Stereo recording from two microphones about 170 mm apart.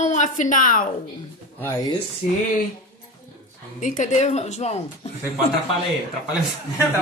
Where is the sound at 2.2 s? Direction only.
45° left (ahead or behind).